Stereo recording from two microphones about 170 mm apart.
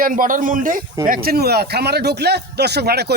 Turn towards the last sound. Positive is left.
turn(degrees=-75)  # may be behind; listen again after turning